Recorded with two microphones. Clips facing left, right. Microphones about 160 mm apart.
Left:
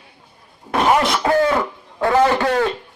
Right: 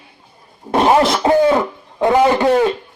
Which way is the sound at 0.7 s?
30° right (ahead or behind).